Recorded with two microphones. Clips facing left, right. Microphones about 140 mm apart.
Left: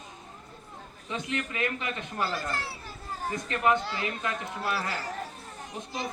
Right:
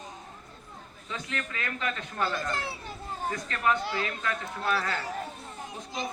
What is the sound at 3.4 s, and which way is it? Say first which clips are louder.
Speech: left 3 dB; 20° left (ahead or behind).